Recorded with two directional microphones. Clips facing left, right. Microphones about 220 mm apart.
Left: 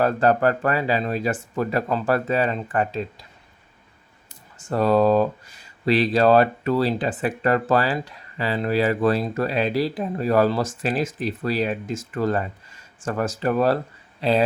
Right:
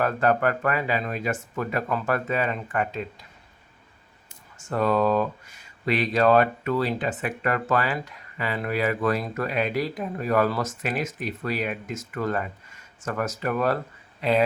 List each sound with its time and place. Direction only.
0.0 s speech: 35° left (ahead or behind)
4.5 s speech: 35° left (ahead or behind)